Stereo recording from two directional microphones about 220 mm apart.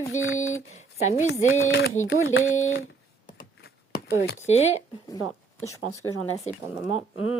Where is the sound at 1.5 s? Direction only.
65° left (ahead or behind).